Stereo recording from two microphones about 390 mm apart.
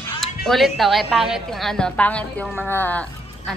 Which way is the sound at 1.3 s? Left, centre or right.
Centre.